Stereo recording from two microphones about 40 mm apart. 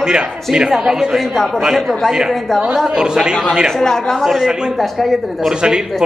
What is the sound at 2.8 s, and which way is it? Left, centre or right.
Speech, centre.